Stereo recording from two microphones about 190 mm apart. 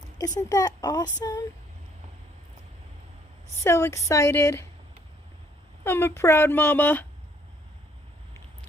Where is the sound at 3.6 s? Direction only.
15° left (ahead or behind).